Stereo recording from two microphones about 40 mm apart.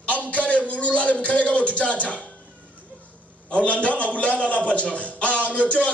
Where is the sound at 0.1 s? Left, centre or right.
Left.